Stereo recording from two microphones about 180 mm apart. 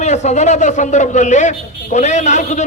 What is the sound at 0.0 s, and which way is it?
A man's voice, 40° left (ahead or behind).